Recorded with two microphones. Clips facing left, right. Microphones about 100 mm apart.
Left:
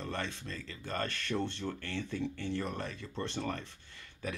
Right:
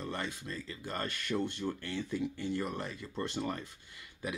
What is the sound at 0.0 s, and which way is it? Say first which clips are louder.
Speech: even; 15° right (ahead or behind).